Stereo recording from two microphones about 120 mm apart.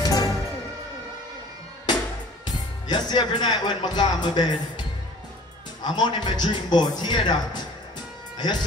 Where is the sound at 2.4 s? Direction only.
35° left (ahead or behind).